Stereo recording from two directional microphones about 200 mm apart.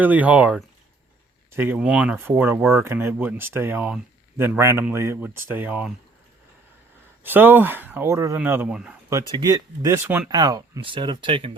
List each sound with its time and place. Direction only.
0.0 s speech: 10° right (ahead or behind)
7.3 s speech: 10° right (ahead or behind)
9.0 s speech: 15° right (ahead or behind)